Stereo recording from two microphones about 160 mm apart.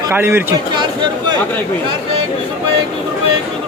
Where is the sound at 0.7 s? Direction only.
30° right (ahead or behind).